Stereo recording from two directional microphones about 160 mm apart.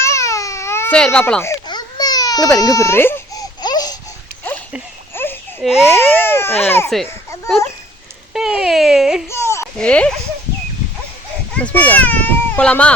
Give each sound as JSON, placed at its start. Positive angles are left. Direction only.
{"t": 0.0, "sound": "baby cry", "side_deg": 20}
{"t": 0.9, "sound": "speech", "side_deg": 5}
{"t": 1.6, "sound": "baby cry", "side_deg": 25}
{"t": 3.6, "sound": "laughter", "side_deg": 25}
{"t": 5.1, "sound": "a sound", "side_deg": 15}
{"t": 5.6, "sound": "speech", "side_deg": 0}
{"t": 6.1, "sound": "speech", "side_deg": 15}
{"t": 8.3, "sound": "a sound", "side_deg": -5}
{"t": 9.3, "sound": "a sound", "side_deg": 15}
{"t": 9.7, "sound": "speech", "side_deg": 5}
{"t": 11.5, "sound": "a child's voice", "side_deg": 10}